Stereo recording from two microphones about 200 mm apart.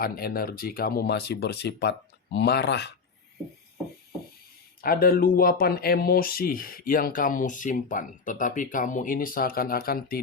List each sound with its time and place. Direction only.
0.0 s speech: 50° left (ahead or behind)
4.8 s speech: 50° left (ahead or behind)